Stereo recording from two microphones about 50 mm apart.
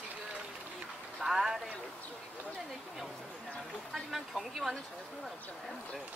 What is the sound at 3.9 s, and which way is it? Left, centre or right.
Speech, centre.